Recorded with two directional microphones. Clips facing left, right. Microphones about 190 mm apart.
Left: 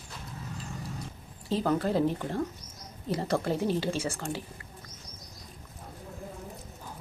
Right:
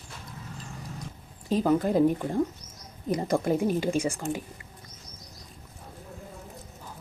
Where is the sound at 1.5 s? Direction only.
15° right (ahead or behind).